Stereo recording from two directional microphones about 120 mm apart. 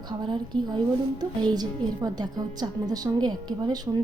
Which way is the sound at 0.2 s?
40° right (ahead or behind).